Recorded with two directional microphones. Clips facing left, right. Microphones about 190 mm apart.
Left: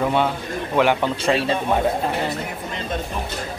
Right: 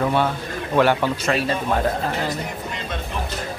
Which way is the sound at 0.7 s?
15° left (ahead or behind).